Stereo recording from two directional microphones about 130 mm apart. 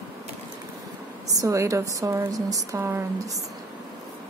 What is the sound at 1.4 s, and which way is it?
A woman's voice, 25° right (ahead or behind).